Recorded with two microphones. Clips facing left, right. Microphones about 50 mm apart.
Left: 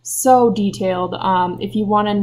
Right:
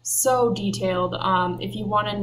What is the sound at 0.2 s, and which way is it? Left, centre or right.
Speech, left.